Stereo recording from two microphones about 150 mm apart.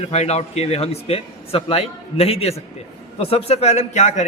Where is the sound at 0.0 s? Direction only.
45° left (ahead or behind).